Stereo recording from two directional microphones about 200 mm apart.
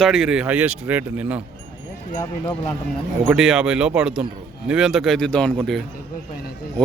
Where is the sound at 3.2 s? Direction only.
5° right (ahead or behind).